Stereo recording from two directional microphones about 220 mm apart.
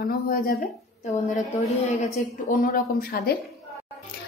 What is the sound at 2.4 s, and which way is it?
Speech, 40° left (ahead or behind).